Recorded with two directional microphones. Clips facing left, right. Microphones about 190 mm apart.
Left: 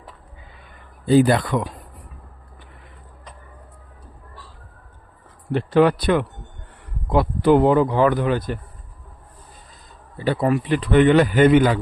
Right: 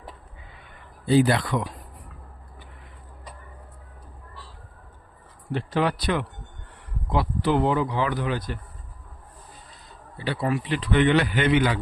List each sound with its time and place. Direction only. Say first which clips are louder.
1.0 s a man's voice: left 4 dB; 50° left (ahead or behind)
5.5 s a man's voice: left 8 dB; 60° left (ahead or behind)
10.2 s a man's voice: left 6 dB; 50° left (ahead or behind)